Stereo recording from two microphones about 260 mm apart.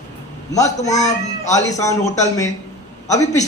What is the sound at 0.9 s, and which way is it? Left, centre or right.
Speech, left.